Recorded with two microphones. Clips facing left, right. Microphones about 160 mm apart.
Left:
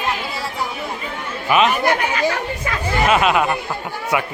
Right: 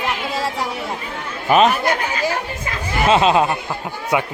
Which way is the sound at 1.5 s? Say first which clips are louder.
Right 2 dB; 40° right (ahead or behind).